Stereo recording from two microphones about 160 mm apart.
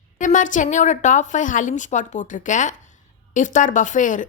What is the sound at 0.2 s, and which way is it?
A woman's voice, 55° left (ahead or behind).